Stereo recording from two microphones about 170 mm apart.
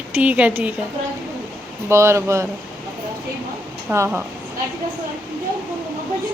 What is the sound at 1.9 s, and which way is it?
Speech, 15° right (ahead or behind).